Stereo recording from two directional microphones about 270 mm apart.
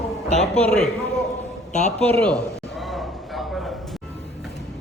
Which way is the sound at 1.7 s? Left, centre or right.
Left.